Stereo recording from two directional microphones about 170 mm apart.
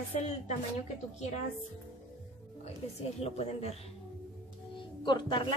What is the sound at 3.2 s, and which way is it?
Speech, 40° left (ahead or behind).